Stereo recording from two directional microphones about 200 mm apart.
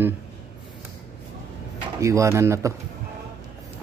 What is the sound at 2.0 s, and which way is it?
Speech, 15° right (ahead or behind).